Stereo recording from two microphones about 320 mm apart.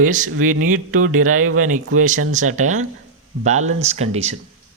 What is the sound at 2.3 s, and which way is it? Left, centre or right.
Speech, right.